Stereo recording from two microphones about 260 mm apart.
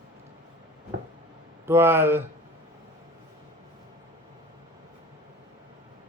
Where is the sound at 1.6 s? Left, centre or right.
Centre.